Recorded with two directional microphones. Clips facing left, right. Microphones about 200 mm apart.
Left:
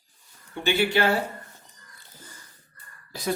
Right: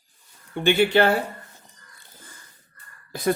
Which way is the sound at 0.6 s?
55° right (ahead or behind).